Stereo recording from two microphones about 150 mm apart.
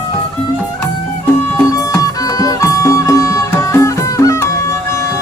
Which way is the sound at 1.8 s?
25° left (ahead or behind).